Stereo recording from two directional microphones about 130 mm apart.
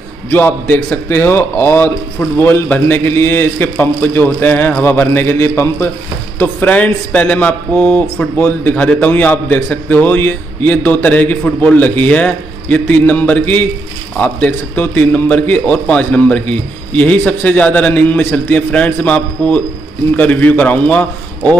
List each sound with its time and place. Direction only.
0.3 s speech: 15° left (ahead or behind)